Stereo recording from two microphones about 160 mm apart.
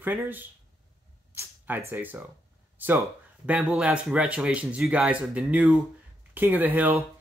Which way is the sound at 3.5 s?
5° right (ahead or behind).